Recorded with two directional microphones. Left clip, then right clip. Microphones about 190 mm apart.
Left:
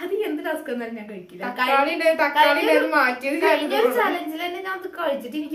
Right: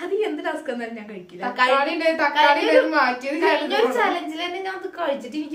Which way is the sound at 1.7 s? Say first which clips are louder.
Left 1 dB; 15° left (ahead or behind).